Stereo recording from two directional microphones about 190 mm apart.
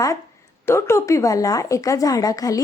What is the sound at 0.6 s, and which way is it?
Speech, 15° left (ahead or behind).